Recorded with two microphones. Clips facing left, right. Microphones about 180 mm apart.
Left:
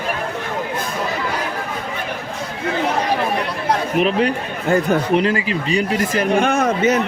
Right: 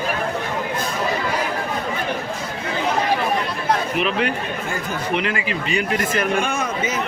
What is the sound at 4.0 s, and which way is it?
Speech, 40° left (ahead or behind).